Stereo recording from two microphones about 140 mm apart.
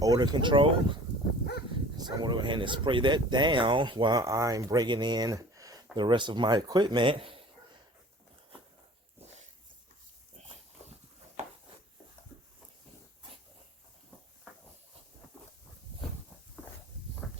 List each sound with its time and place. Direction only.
0.0 s speech: 30° right (ahead or behind)